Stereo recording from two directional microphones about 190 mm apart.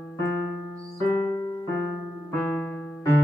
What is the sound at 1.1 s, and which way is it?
Keyboard, 15° left (ahead or behind).